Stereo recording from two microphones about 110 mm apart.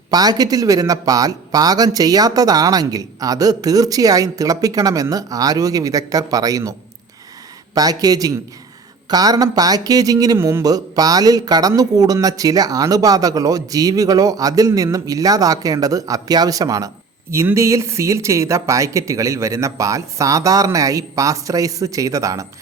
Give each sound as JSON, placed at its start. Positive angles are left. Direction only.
{"t": 0.1, "sound": "speech", "side_deg": -35}
{"t": 7.8, "sound": "speech", "side_deg": -35}
{"t": 10.3, "sound": "speech", "side_deg": -20}
{"t": 10.6, "sound": "speech", "side_deg": -35}